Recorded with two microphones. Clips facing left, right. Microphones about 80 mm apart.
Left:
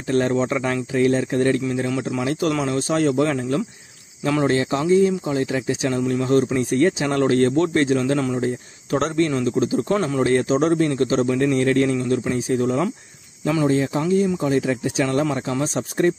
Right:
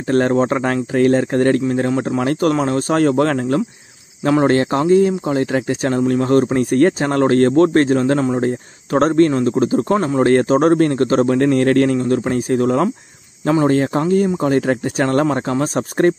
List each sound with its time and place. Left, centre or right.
0.1 s speech: right
4.2 s speech: right
4.5 s speech: right
10.2 s speech: right